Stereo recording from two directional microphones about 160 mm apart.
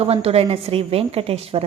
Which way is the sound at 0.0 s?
40° right (ahead or behind).